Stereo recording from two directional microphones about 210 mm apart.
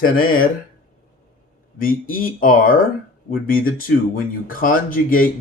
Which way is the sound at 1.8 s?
40° left (ahead or behind).